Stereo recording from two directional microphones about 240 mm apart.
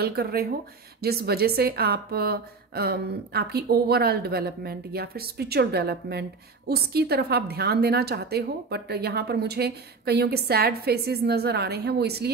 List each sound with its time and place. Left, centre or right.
0.0 s a woman's voice: right